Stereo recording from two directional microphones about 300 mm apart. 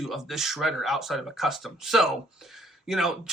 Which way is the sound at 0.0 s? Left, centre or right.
Centre.